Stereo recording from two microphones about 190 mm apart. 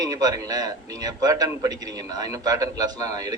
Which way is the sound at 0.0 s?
20° right (ahead or behind).